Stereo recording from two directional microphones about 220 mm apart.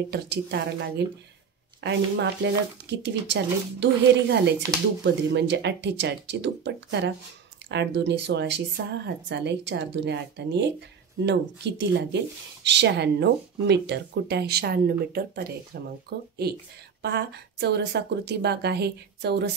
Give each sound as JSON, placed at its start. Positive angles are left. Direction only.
{"t": 0.1, "sound": "a woman's voice", "side_deg": -50}